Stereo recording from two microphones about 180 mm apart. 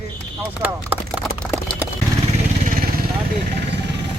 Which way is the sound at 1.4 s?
5° left (ahead or behind).